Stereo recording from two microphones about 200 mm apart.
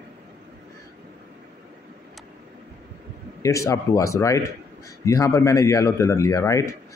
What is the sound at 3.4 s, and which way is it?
Speech, 15° left (ahead or behind).